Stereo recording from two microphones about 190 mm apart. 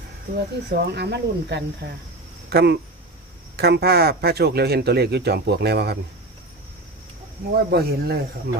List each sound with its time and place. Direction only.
0.3 s speech: 60° right (ahead or behind)
7.5 s speech: 55° right (ahead or behind)